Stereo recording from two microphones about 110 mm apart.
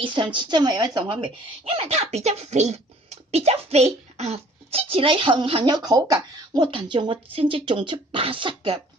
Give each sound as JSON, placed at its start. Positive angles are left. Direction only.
{"t": 0.0, "sound": "speech", "side_deg": -45}